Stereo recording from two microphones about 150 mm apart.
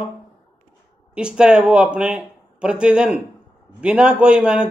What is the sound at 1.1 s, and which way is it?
A man's voice, 5° right (ahead or behind).